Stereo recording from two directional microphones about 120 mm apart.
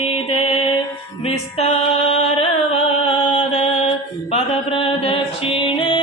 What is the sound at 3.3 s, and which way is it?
Mantra, 65° left (ahead or behind).